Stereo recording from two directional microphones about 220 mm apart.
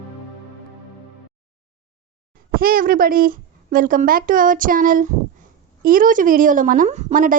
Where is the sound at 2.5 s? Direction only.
40° right (ahead or behind).